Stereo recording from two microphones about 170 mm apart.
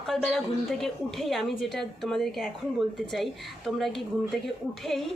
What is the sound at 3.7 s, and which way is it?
Speech, centre (ahead or behind).